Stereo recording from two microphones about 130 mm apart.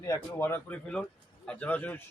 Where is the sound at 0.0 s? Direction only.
20° left (ahead or behind).